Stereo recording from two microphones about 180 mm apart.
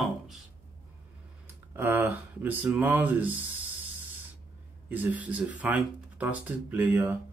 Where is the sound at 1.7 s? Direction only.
10° right (ahead or behind).